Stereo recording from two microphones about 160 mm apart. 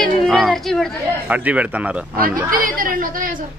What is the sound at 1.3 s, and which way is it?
Speech, 10° right (ahead or behind).